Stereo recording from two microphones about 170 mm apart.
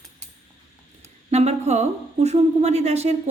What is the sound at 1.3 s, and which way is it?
A woman's voice, 40° right (ahead or behind).